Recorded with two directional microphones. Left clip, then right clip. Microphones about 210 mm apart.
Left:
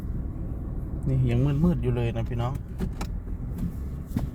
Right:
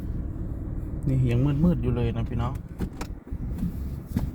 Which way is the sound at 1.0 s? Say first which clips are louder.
Right 1 dB; 25° right (ahead or behind).